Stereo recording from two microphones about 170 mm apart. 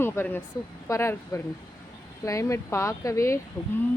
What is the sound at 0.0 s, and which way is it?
Speech, 15° left (ahead or behind).